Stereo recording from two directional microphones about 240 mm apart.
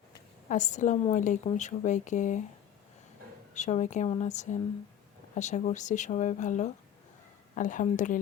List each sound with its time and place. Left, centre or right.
0.4 s a woman's voice: left
3.5 s a woman's voice: left